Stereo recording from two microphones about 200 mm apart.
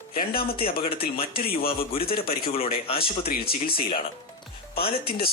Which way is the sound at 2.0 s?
50° left (ahead or behind).